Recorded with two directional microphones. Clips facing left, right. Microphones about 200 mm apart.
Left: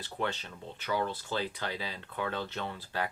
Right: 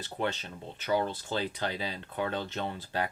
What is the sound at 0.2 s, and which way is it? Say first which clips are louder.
Speech: right 2 dB; 20° right (ahead or behind).